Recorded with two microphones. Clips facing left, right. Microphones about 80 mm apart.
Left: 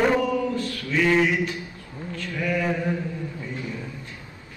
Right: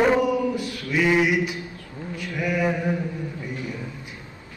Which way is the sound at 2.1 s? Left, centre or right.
Centre.